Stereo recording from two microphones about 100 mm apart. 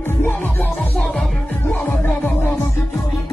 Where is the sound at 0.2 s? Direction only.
15° left (ahead or behind).